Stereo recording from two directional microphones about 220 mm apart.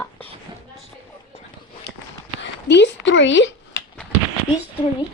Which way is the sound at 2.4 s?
55° left (ahead or behind).